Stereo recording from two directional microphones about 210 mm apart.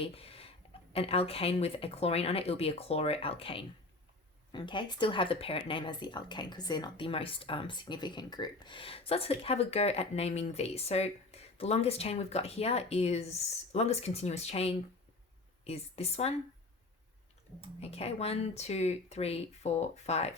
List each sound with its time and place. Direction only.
0.0 s a sound: 30° left (ahead or behind)
0.9 s speech: 30° left (ahead or behind)
17.7 s speech: 30° left (ahead or behind)